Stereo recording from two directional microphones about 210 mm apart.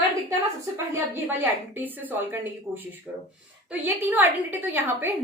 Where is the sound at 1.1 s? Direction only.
10° right (ahead or behind).